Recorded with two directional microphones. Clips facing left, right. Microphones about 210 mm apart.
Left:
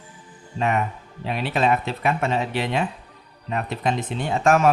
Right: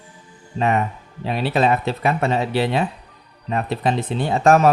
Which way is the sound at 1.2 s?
35° right (ahead or behind).